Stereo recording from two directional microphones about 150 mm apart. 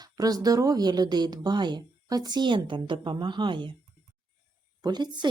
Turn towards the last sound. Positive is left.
turn(degrees=-30)  # may be behind; listen again after turning